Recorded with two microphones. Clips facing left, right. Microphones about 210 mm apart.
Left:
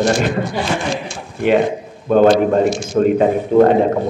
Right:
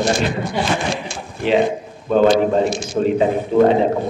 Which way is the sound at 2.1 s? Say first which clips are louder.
Left 2 dB; 50° left (ahead or behind).